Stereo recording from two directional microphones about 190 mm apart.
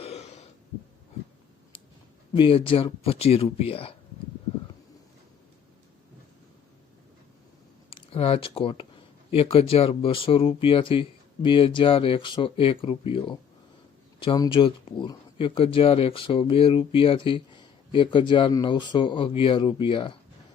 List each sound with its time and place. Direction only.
0.0 s throat clearing: 35° left (ahead or behind)
2.3 s speech: 30° left (ahead or behind)
7.9 s speech: 30° left (ahead or behind)